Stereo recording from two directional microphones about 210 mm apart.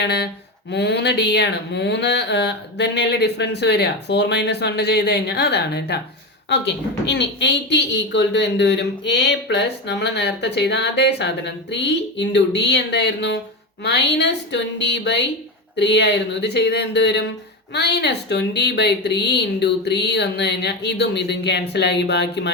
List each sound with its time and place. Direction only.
0.0 s a woman's voice: 50° left (ahead or behind)